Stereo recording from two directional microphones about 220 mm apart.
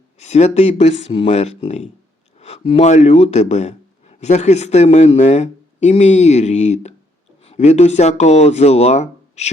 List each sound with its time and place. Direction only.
0.2 s speech: 30° left (ahead or behind)